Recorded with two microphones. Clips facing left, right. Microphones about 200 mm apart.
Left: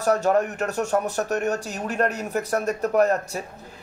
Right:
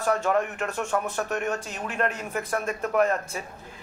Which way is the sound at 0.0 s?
40° left (ahead or behind).